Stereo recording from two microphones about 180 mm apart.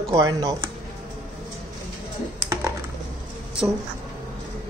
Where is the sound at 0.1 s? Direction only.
20° right (ahead or behind).